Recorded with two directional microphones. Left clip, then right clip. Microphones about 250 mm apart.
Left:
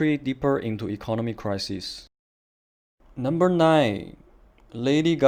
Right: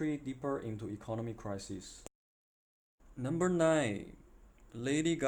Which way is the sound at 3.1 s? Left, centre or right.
Left.